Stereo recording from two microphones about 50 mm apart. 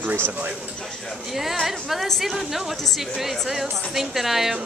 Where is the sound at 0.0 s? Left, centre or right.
Right.